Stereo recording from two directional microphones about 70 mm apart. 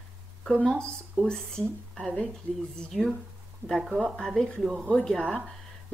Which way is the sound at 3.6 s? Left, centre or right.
Centre.